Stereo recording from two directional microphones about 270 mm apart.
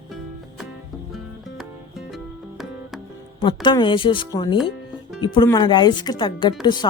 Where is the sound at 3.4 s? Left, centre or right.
Centre.